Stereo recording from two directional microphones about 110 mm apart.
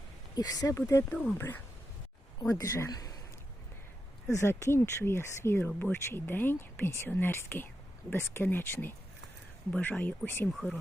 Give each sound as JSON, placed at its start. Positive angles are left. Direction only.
{"t": 0.3, "sound": "a woman's voice", "side_deg": 35}
{"t": 1.1, "sound": "speech", "side_deg": 15}
{"t": 2.4, "sound": "a woman's voice", "side_deg": 30}
{"t": 4.3, "sound": "speech", "side_deg": 25}
{"t": 10.5, "sound": "speech", "side_deg": 0}